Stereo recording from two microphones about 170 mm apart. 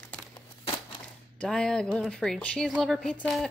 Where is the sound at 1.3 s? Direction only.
5° left (ahead or behind).